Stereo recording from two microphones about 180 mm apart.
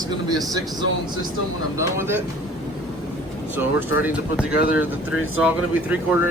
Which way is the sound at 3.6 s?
10° right (ahead or behind).